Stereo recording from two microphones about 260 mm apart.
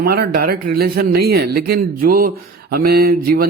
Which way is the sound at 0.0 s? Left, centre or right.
Right.